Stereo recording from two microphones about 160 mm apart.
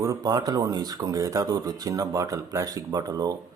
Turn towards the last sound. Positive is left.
turn(degrees=-25)  # may be behind; listen again after turning